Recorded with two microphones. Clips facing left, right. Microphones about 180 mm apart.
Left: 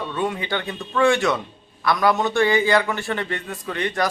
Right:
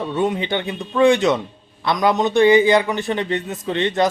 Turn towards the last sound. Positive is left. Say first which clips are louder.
# right 5 dB
turn(degrees=-25)  # may be behind; listen again after turning